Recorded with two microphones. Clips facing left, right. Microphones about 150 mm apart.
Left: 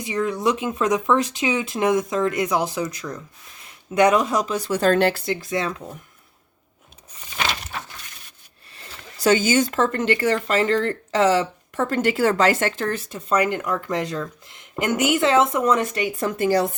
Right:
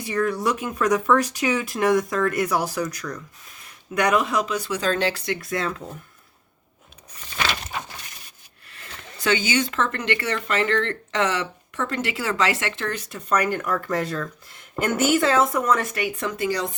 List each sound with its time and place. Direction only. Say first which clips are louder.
0.0 s speech: left 1 dB; 20° left (ahead or behind); by 4.7 s 35° left (ahead or behind)
4.7 s speech: left 7 dB; 55° left (ahead or behind)
5.4 s speech: left 2 dB; 20° left (ahead or behind)
8.7 s speech: right 1 dB; 30° left (ahead or behind)